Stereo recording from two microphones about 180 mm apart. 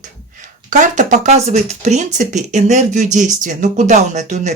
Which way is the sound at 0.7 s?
45° right (ahead or behind).